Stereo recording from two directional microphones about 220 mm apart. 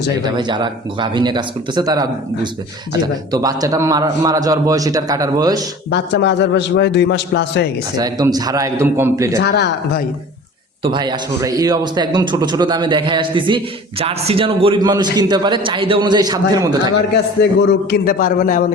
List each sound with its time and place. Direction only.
0.2 s a man's voice: 20° right (ahead or behind)
5.9 s a man's voice: 55° left (ahead or behind)
7.9 s a man's voice: 15° right (ahead or behind)
9.4 s a man's voice: 50° left (ahead or behind)
10.8 s a man's voice: 20° right (ahead or behind)
17.7 s a man's voice: 45° left (ahead or behind)